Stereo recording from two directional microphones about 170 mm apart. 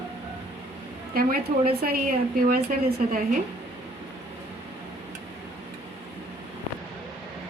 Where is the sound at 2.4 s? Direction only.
55° right (ahead or behind).